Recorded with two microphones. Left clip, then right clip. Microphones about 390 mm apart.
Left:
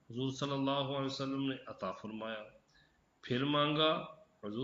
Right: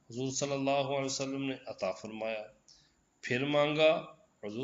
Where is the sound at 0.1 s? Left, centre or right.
Right.